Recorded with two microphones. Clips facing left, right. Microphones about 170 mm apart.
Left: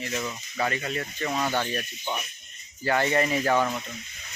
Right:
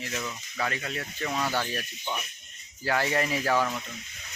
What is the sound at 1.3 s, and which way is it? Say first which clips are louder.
Speech: left 2 dB; 15° left (ahead or behind).